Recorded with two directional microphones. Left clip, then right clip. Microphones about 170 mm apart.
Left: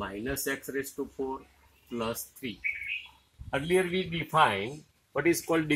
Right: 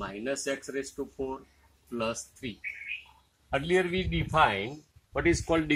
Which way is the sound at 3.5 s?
20° right (ahead or behind).